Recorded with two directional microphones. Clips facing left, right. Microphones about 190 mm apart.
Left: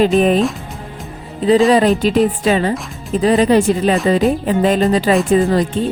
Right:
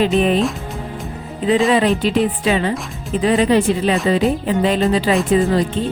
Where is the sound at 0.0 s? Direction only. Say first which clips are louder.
Left 3 dB; 45° left (ahead or behind).